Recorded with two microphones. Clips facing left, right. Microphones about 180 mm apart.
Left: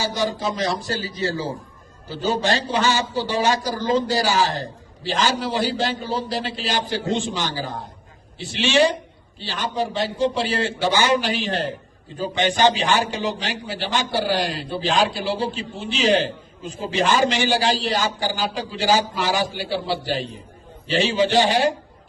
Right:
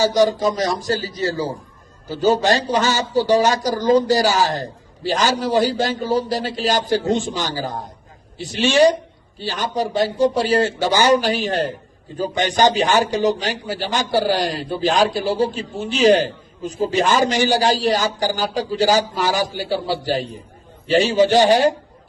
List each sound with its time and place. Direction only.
0.0 s speech: 40° right (ahead or behind)